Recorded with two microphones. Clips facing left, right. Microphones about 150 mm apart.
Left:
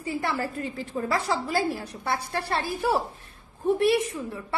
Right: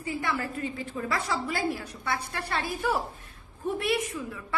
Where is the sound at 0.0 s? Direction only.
35° left (ahead or behind).